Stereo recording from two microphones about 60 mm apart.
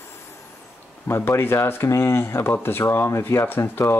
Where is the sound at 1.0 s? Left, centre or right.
Left.